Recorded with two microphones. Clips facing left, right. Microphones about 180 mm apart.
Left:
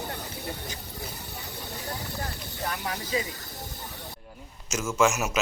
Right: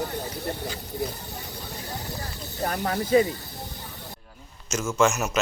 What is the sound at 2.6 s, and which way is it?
Speech, 45° right (ahead or behind).